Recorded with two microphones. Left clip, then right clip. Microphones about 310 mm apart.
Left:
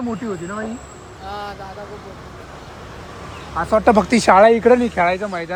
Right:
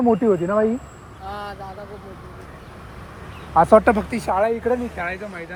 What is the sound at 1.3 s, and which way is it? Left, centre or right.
Vehicle, centre.